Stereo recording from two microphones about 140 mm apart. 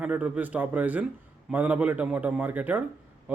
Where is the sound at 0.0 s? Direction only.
10° right (ahead or behind).